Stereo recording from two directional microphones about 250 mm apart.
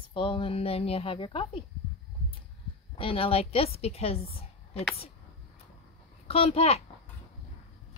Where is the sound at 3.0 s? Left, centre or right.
Left.